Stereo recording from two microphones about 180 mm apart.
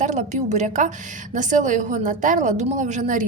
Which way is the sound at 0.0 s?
40° right (ahead or behind).